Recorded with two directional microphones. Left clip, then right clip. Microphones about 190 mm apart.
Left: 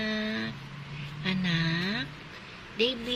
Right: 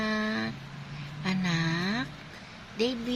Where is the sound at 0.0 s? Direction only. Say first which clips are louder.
Right 2 dB; 10° right (ahead or behind).